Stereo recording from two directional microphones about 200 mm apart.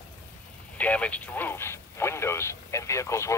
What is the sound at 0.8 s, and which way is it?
Speech, 5° left (ahead or behind).